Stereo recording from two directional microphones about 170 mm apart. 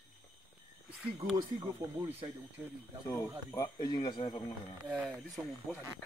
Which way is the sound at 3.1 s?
20° left (ahead or behind).